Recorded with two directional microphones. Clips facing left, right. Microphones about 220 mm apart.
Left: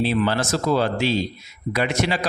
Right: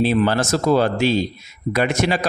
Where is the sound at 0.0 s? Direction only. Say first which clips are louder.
Right 3 dB; 45° right (ahead or behind).